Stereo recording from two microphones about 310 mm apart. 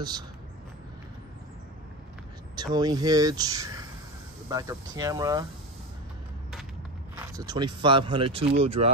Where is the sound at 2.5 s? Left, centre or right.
Centre.